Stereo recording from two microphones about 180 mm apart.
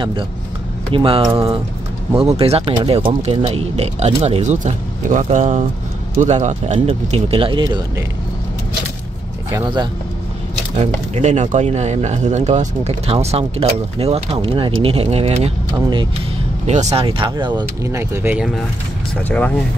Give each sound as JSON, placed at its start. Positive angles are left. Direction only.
{"t": 0.9, "sound": "speech", "side_deg": -30}
{"t": 9.5, "sound": "speech", "side_deg": -25}
{"t": 10.8, "sound": "speech", "side_deg": -40}
{"t": 19.2, "sound": "speech", "side_deg": 10}